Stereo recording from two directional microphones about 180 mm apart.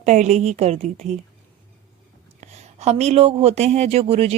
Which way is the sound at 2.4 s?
40° right (ahead or behind).